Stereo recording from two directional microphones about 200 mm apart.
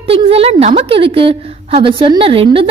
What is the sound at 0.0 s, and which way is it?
A woman's voice, 30° right (ahead or behind).